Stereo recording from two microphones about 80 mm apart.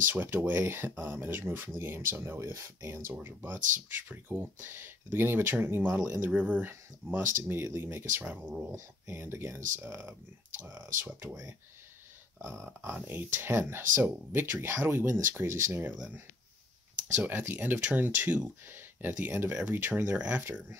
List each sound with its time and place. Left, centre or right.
0.0 s speech: right
8.3 s speech: centre
8.7 s speech: right
13.0 s speech: right
17.2 s speech: right